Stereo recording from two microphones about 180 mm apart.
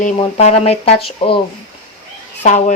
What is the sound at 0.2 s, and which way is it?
Speech, 35° left (ahead or behind).